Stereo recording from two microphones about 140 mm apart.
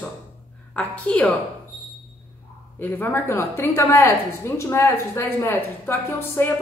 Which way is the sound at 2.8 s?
15° left (ahead or behind).